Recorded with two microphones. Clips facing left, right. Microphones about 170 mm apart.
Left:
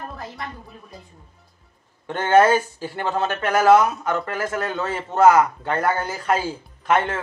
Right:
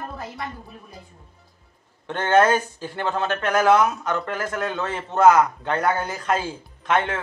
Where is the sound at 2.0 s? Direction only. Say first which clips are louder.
Left 2 dB; 10° left (ahead or behind).